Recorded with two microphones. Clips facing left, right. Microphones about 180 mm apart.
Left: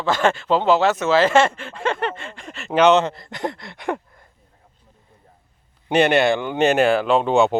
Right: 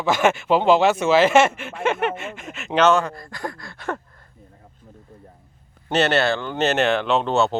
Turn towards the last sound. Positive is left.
turn(degrees=15)  # may be behind; listen again after turning